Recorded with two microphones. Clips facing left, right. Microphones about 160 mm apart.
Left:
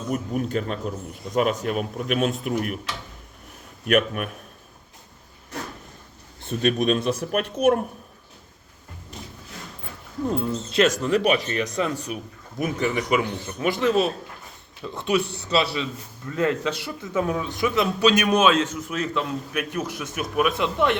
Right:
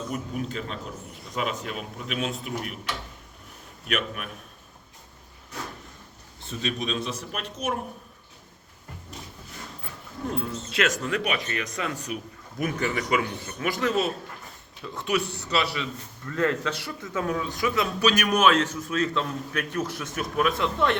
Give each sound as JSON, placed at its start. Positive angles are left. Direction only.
{"t": 0.1, "sound": "a man's voice", "side_deg": 45}
{"t": 3.8, "sound": "a man's voice", "side_deg": 50}
{"t": 6.6, "sound": "speech", "side_deg": 55}
{"t": 10.3, "sound": "a man's voice", "side_deg": 35}